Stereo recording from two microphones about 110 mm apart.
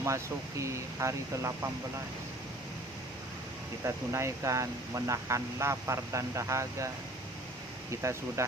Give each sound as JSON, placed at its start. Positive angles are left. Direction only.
{"t": 0.0, "sound": "speech", "side_deg": -30}
{"t": 3.8, "sound": "speech", "side_deg": -25}
{"t": 8.4, "sound": "speech", "side_deg": -30}